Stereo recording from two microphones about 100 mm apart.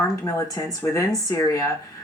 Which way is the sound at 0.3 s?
35° left (ahead or behind).